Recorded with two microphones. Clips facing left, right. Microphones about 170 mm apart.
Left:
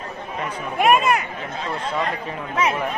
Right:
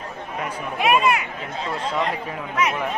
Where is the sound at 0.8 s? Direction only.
45° left (ahead or behind).